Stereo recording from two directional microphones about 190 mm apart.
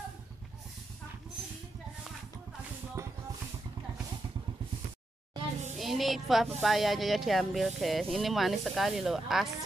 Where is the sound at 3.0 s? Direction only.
15° right (ahead or behind).